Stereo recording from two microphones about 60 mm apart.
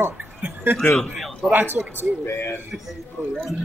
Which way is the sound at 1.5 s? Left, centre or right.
Right.